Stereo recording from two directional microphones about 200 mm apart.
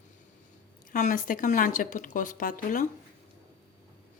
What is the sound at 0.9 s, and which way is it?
Speech, 40° left (ahead or behind).